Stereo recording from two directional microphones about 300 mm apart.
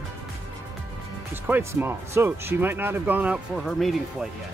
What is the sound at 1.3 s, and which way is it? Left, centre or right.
Speech, centre.